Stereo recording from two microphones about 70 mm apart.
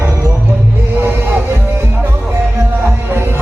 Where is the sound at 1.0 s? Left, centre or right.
Right.